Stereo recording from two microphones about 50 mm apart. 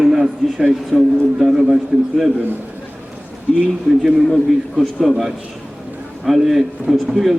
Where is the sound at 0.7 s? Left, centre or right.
Centre.